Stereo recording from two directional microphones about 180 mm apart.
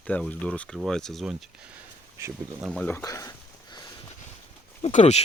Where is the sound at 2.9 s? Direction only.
15° left (ahead or behind).